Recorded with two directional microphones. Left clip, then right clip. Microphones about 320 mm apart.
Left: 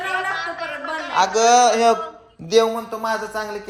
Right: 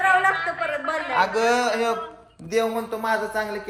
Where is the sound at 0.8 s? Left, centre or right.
Centre.